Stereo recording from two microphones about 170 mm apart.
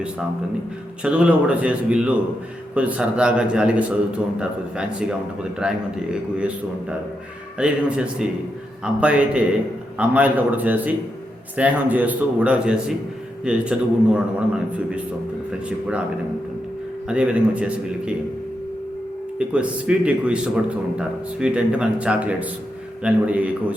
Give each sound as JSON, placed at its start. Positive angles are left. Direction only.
{"t": 1.0, "sound": "speech", "side_deg": -5}
{"t": 7.6, "sound": "speech", "side_deg": -5}
{"t": 17.1, "sound": "speech", "side_deg": -5}
{"t": 19.4, "sound": "speech", "side_deg": -5}